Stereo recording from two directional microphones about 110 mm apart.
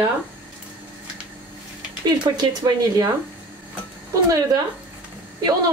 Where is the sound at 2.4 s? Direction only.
35° right (ahead or behind).